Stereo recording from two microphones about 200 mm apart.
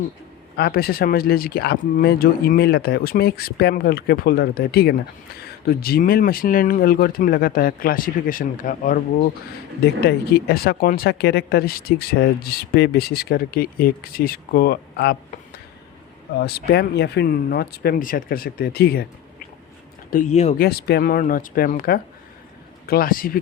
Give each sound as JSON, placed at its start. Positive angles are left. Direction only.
{"t": 0.5, "sound": "speech", "side_deg": 50}
{"t": 10.1, "sound": "speech", "side_deg": 50}
{"t": 16.4, "sound": "speech", "side_deg": 50}
{"t": 20.1, "sound": "speech", "side_deg": 40}
{"t": 20.6, "sound": "speech", "side_deg": 50}